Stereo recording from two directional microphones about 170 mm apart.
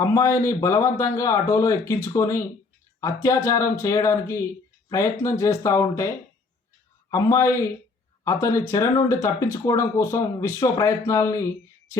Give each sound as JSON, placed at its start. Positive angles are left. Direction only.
{"t": 0.0, "sound": "a man's voice", "side_deg": 20}